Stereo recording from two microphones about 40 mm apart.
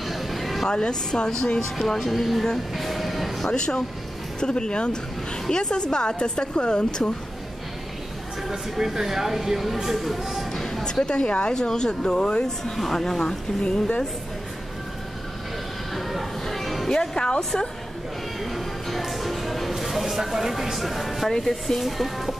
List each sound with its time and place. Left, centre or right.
0.0 s a sound: centre
0.7 s a woman's voice: left
1.8 s speech: centre
2.7 s music: centre
3.4 s a woman's voice: centre
8.5 s speech: centre
10.5 s speech: centre
12.7 s a woman's voice: centre
13.6 s a woman's voice: left
15.9 s a sound: centre
16.9 s a woman's voice: centre
18.4 s a sound: centre
19.7 s speech: centre